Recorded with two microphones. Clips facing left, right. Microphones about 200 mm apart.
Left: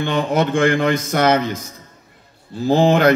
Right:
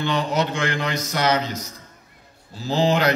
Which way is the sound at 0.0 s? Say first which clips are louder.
Left 4 dB; 55° left (ahead or behind).